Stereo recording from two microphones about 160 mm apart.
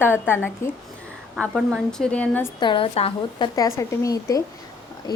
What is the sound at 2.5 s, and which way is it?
Speech, 30° left (ahead or behind).